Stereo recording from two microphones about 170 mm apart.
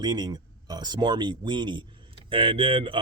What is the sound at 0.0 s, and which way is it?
Speech, 25° right (ahead or behind).